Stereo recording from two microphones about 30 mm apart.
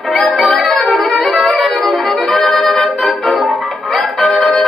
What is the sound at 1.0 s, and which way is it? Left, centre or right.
Music, centre.